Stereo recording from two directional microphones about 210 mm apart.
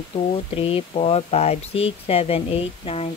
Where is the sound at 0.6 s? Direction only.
25° left (ahead or behind).